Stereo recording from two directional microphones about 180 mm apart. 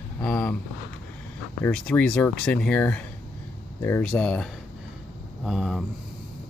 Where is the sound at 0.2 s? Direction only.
5° left (ahead or behind).